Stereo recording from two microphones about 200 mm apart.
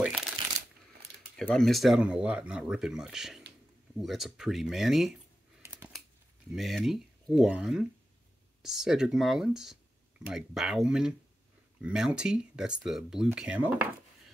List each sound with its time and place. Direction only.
0.0 s shuffling cards: centre (ahead or behind)
1.3 s speech: centre (ahead or behind)
5.6 s scissors: 10° right (ahead or behind)
6.5 s speech: centre (ahead or behind)